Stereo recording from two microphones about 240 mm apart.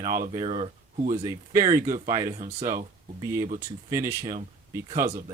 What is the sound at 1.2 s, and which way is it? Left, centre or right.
Speech, centre.